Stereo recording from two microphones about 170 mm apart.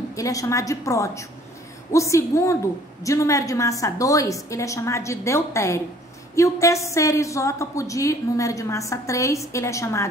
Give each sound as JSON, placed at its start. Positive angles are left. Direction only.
{"t": 0.1, "sound": "a woman's voice", "side_deg": 20}